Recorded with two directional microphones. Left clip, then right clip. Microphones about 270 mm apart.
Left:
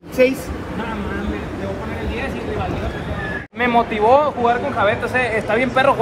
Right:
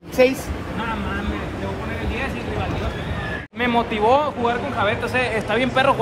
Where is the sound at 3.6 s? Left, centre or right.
Centre.